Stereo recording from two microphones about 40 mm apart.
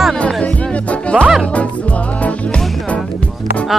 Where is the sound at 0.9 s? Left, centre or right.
Left.